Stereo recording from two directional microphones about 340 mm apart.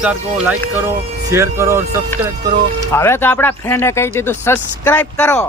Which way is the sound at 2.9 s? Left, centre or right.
Centre.